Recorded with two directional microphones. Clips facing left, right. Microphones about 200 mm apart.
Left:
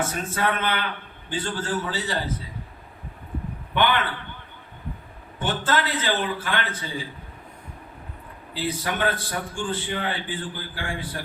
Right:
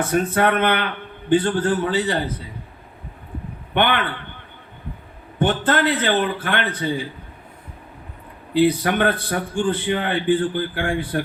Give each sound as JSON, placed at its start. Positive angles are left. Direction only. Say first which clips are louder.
{"t": 0.0, "sound": "a man's voice", "louder": "right 7 dB", "side_deg": -60}
{"t": 5.4, "sound": "a man's voice", "louder": "right 6 dB", "side_deg": -60}
{"t": 8.5, "sound": "a man's voice", "louder": "right 10 dB", "side_deg": -60}